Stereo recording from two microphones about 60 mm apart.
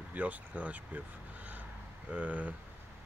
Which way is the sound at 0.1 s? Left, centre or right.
Right.